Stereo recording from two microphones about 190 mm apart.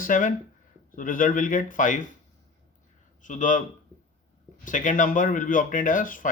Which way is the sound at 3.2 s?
40° left (ahead or behind).